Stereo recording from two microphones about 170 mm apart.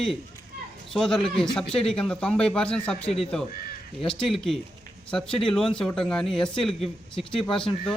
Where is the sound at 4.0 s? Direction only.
5° left (ahead or behind).